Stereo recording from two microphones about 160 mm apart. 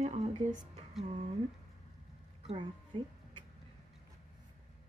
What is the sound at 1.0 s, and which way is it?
Speech, 50° right (ahead or behind).